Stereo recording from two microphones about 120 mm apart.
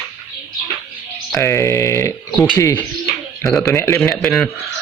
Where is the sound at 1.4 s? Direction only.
20° left (ahead or behind).